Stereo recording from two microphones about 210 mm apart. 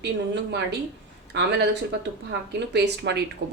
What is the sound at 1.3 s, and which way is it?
Speech, 55° right (ahead or behind).